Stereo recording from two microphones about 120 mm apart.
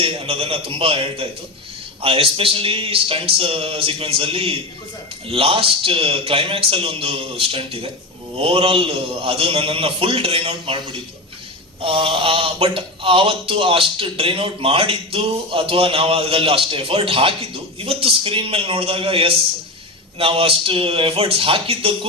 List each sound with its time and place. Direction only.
0.0 s speech: 55° right (ahead or behind)
11.8 s speech: 50° right (ahead or behind)